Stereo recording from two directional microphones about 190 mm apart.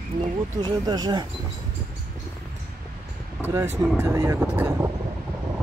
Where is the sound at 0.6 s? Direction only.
20° right (ahead or behind).